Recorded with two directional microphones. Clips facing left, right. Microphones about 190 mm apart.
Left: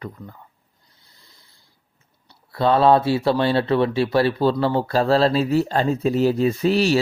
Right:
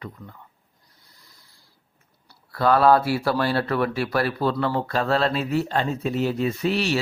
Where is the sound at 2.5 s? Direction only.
25° left (ahead or behind).